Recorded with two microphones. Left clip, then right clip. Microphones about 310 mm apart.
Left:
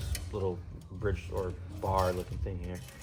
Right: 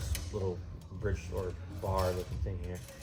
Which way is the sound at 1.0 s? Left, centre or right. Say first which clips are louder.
Left 3 dB; centre.